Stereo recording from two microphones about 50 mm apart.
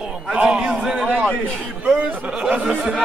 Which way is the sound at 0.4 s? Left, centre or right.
Right.